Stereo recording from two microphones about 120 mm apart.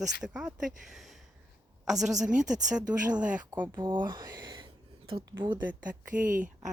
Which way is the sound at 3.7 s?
40° right (ahead or behind).